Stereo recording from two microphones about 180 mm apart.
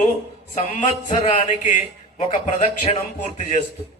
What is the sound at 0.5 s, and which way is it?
Mantra, 40° left (ahead or behind).